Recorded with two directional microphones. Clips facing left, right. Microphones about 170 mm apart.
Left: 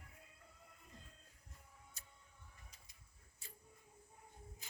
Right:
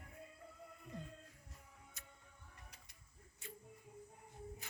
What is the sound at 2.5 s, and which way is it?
Music, 70° right (ahead or behind).